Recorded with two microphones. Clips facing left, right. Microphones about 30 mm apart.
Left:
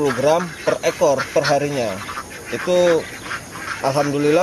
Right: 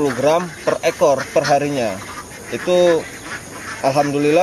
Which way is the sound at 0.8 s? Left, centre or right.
Centre.